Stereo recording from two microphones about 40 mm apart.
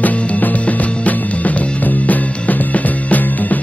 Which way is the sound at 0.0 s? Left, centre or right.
Left.